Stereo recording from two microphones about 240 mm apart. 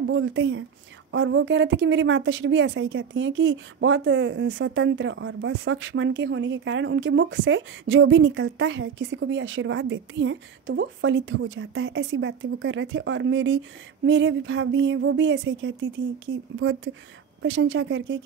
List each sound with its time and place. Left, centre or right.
0.0 s speech: right